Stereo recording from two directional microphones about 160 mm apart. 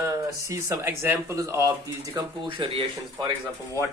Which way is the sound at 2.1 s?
30° right (ahead or behind).